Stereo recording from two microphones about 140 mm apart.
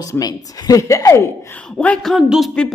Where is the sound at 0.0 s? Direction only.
25° left (ahead or behind).